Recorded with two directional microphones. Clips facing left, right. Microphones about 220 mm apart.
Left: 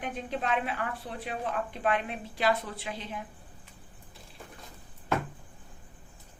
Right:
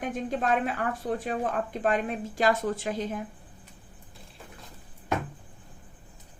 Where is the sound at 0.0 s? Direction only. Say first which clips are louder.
Right 4 dB; 45° right (ahead or behind).